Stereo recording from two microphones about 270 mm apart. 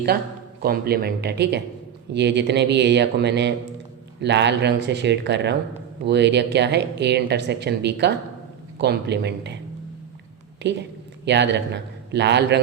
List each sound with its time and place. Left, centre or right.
0.6 s speech: right
10.6 s speech: right